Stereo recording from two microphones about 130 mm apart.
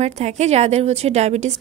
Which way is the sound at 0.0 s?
60° right (ahead or behind).